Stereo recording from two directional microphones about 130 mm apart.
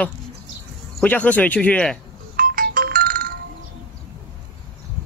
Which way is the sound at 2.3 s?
90° right.